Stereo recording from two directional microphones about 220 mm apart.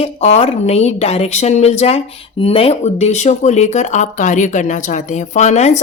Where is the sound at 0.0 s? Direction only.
25° left (ahead or behind).